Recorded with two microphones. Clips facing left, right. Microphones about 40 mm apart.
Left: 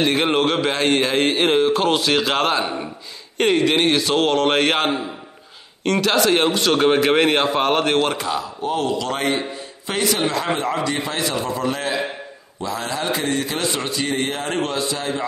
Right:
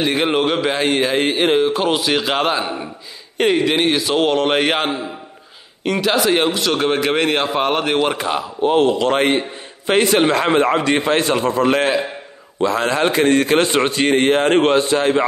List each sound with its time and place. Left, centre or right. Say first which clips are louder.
0.0 s speech: right 1 dB; centre
8.2 s a man's voice: right 5 dB; right